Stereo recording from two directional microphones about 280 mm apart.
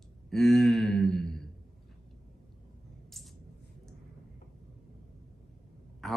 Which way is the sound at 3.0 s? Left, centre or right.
Centre.